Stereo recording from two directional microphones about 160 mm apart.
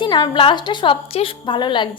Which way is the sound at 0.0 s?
30° left (ahead or behind).